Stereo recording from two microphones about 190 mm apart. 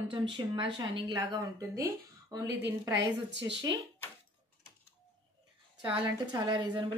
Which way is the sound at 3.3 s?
65° right (ahead or behind).